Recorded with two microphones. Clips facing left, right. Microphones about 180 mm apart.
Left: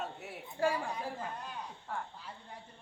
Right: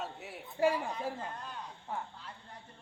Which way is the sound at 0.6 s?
20° right (ahead or behind).